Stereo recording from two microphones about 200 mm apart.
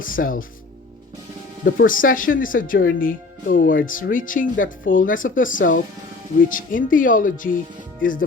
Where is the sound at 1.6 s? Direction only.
45° left (ahead or behind).